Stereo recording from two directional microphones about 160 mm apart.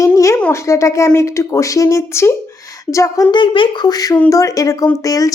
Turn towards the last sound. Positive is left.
turn(degrees=20)  # may be behind; listen again after turning